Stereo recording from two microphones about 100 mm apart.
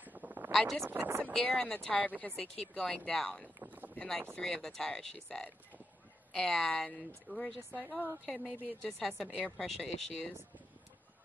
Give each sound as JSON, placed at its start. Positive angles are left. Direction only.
{"t": 0.0, "sound": "a sound", "side_deg": -15}
{"t": 0.5, "sound": "speech", "side_deg": 0}
{"t": 0.8, "sound": "speech", "side_deg": -20}
{"t": 1.3, "sound": "speech", "side_deg": 10}
{"t": 3.5, "sound": "boat", "side_deg": -20}
{"t": 3.9, "sound": "speech", "side_deg": 10}